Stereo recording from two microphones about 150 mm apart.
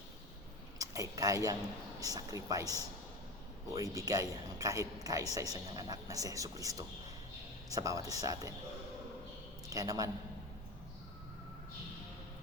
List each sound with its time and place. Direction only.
0.8 s speech: 20° right (ahead or behind)
9.6 s a man's voice: 25° right (ahead or behind)